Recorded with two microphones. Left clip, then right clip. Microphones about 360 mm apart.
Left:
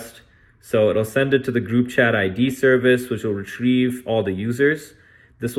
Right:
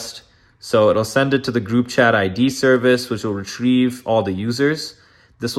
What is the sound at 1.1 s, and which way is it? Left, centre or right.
Speech, centre.